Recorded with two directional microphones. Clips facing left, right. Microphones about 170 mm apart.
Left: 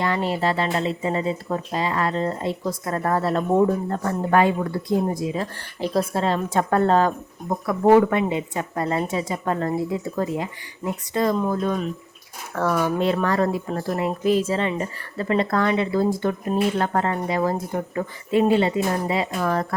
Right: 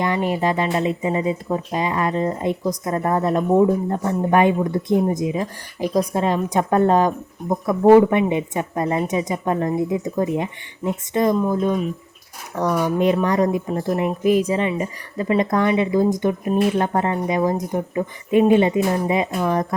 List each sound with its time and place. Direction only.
0.0 s a woman's voice: 15° right (ahead or behind)